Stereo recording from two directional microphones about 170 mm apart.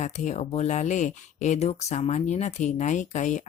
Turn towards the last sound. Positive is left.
turn(degrees=45)  # may be behind; listen again after turning